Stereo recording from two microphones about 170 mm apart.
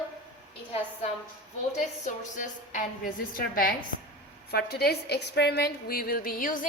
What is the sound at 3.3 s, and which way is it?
A woman's voice, 60° left (ahead or behind).